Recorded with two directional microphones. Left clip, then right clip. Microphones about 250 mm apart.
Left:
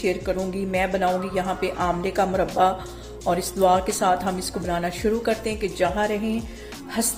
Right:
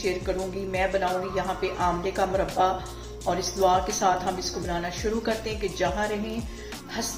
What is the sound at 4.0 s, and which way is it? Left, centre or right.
Music, left.